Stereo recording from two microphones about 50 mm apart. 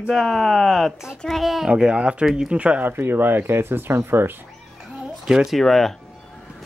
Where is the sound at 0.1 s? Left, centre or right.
Centre.